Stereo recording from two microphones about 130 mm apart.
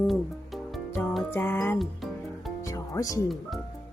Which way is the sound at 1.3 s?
20° left (ahead or behind).